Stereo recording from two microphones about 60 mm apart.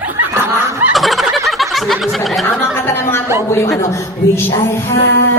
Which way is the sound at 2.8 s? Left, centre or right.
Left.